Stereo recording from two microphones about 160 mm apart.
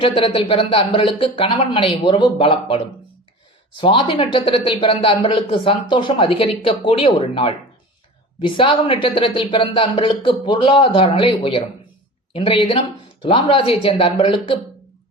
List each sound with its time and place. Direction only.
0.0 s a woman's voice: 35° left (ahead or behind)